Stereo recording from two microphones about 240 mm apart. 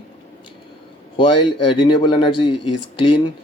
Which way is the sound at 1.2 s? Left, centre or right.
Left.